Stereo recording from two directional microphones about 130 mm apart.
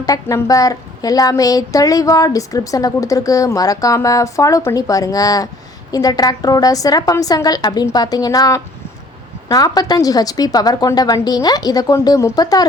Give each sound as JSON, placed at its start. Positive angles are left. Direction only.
{"t": 0.0, "sound": "a woman's voice", "side_deg": 25}